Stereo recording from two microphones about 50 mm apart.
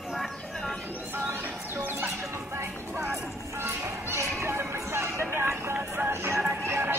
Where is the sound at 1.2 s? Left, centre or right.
Right.